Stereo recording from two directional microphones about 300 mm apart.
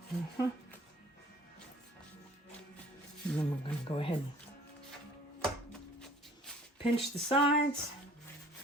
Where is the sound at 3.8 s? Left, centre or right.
Centre.